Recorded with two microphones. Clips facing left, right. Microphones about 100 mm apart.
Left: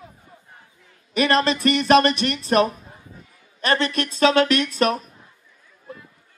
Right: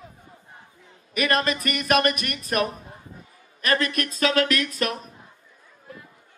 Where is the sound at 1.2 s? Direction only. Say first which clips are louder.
Left 4 dB; 30° left (ahead or behind).